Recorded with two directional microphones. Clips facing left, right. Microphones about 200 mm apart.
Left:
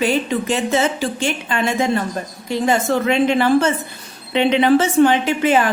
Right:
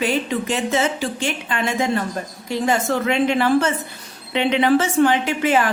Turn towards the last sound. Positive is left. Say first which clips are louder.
# left 2 dB
turn(degrees=25)  # may be behind; listen again after turning